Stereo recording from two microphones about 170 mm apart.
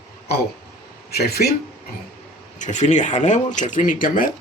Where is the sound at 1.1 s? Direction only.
70° left (ahead or behind).